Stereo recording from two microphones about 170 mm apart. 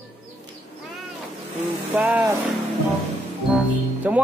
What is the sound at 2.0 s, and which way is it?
Speech, 10° right (ahead or behind).